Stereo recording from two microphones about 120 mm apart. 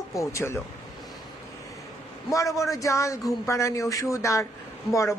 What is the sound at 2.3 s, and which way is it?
Speech, 25° left (ahead or behind).